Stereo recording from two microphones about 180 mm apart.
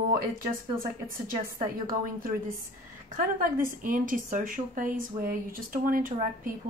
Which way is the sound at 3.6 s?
50° right (ahead or behind).